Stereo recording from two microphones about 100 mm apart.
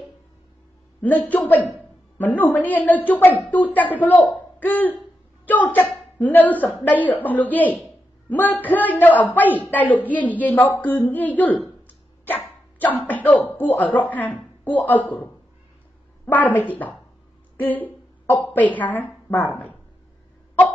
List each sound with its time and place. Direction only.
1.0 s a woman's voice: 15° left (ahead or behind)
12.7 s a sound: 20° left (ahead or behind)
13.6 s a woman's voice: 15° left (ahead or behind)
16.3 s a woman's voice: 15° left (ahead or behind)
17.6 s a sound: 15° left (ahead or behind)
18.5 s a woman's voice: 15° left (ahead or behind)